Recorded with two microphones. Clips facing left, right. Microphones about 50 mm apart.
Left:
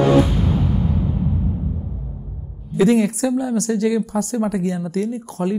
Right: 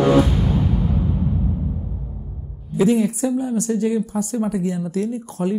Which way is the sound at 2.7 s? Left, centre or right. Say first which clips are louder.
Left 2 dB; left.